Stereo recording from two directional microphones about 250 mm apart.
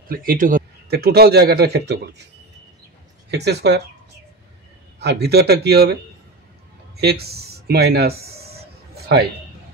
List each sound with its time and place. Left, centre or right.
0.1 s speech: right
3.3 s speech: right
4.9 s speech: right
7.0 s speech: right